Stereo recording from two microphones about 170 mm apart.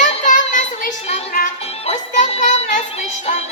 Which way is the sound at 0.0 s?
45° left (ahead or behind).